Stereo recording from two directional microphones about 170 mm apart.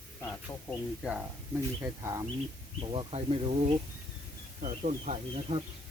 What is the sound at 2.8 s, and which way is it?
Speech, 30° right (ahead or behind).